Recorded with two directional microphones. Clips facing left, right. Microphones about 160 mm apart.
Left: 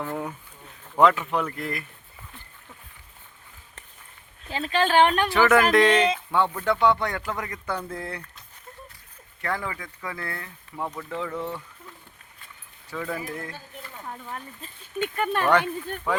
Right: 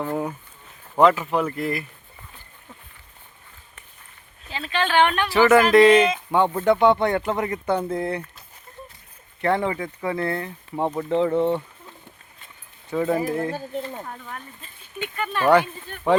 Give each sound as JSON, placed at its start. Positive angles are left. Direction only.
{"t": 0.0, "sound": "speech", "side_deg": -15}
{"t": 0.9, "sound": "speech", "side_deg": 0}
{"t": 4.4, "sound": "speech", "side_deg": 45}
{"t": 5.3, "sound": "speech", "side_deg": -5}
{"t": 6.3, "sound": "speech", "side_deg": -20}
{"t": 9.4, "sound": "speech", "side_deg": -25}
{"t": 14.1, "sound": "speech", "side_deg": 15}
{"t": 14.6, "sound": "speech", "side_deg": 40}
{"t": 15.1, "sound": "speech", "side_deg": 50}